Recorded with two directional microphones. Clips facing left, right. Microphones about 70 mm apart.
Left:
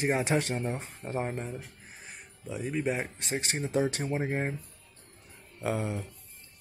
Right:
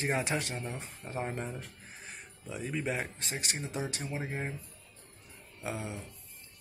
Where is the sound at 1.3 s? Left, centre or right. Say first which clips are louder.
Left 2 dB; centre.